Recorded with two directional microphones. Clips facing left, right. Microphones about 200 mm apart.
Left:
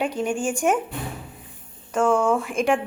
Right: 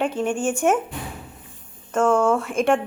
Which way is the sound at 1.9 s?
5° left (ahead or behind).